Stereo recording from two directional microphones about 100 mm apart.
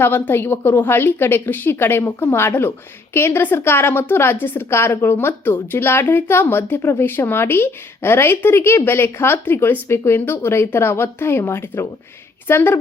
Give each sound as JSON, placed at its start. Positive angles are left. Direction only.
{"t": 0.0, "sound": "a woman's voice", "side_deg": 20}